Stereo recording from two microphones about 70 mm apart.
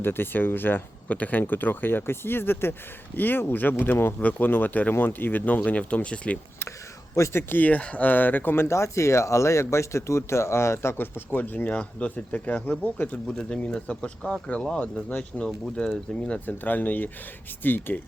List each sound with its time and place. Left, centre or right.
0.0 s speech: left
7.2 s speech: left
7.6 s speech: left
13.2 s speech: centre
15.4 s speech: centre
16.5 s speech: left